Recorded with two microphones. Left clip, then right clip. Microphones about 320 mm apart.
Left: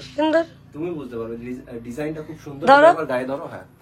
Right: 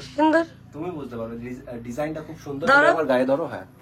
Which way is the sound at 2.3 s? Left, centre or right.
Centre.